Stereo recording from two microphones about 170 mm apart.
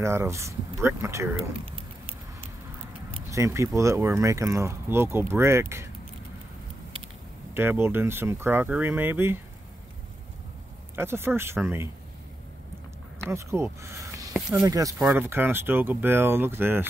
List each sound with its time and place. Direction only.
0.0 s speech: 15° right (ahead or behind)
3.3 s speech: 15° right (ahead or behind)
7.5 s speech: 15° right (ahead or behind)
11.0 s speech: 15° right (ahead or behind)
13.2 s speech: 15° right (ahead or behind)
14.3 s speech: 5° right (ahead or behind)
14.7 s speech: 20° right (ahead or behind)